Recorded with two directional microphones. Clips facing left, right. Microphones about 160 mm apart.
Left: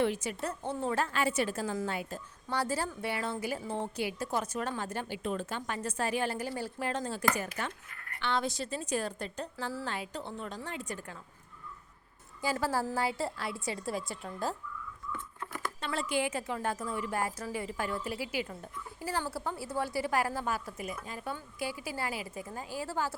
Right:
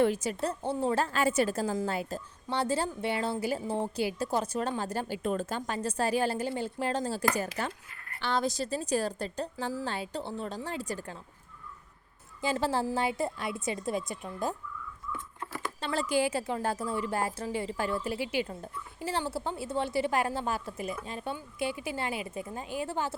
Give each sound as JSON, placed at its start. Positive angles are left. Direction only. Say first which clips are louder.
{"t": 0.0, "sound": "a woman's voice", "louder": "right 4 dB", "side_deg": -40}
{"t": 12.4, "sound": "a woman's voice", "louder": "right 2 dB", "side_deg": -25}
{"t": 15.8, "sound": "a woman's voice", "louder": "right 4 dB", "side_deg": -40}